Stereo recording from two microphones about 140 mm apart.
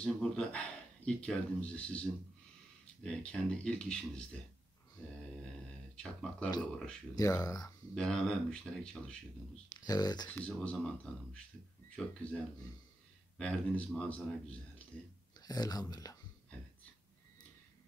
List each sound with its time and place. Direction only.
0.0 s speech: 5° left (ahead or behind)
6.6 s speech: 5° left (ahead or behind)
7.2 s speech: 25° left (ahead or behind)
7.9 s speech: 5° left (ahead or behind)
9.8 s speech: 30° left (ahead or behind)
10.2 s speech: 10° left (ahead or behind)
11.9 s speech: 5° left (ahead or behind)
13.4 s speech: 10° left (ahead or behind)
15.4 s speech: 25° left (ahead or behind)